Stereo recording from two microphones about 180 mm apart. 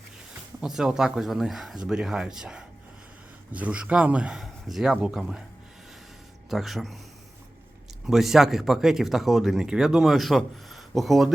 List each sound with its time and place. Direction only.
0.6 s speech: 5° right (ahead or behind)
6.5 s speech: centre (ahead or behind)
8.0 s speech: centre (ahead or behind)